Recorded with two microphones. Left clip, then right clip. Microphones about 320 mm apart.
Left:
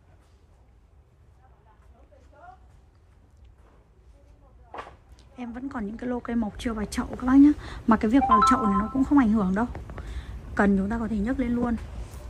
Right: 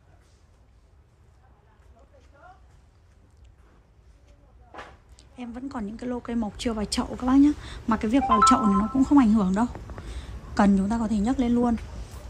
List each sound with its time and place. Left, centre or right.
5.1 s a woman's voice: centre